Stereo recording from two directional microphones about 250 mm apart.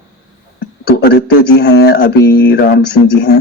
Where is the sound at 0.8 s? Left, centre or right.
Left.